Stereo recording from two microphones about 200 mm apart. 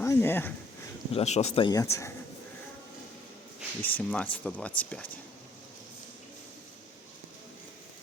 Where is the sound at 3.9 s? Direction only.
10° left (ahead or behind).